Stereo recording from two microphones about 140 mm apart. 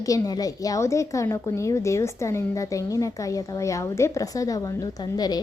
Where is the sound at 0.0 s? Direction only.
25° left (ahead or behind).